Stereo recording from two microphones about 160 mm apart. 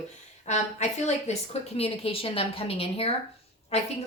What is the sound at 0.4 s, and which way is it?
A woman's voice, 45° left (ahead or behind).